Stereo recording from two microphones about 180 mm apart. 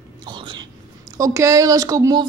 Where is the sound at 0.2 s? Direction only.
25° right (ahead or behind).